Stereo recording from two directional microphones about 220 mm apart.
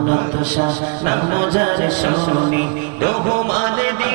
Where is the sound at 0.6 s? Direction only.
20° right (ahead or behind).